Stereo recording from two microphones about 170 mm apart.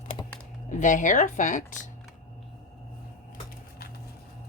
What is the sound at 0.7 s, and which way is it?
Speech, 45° left (ahead or behind).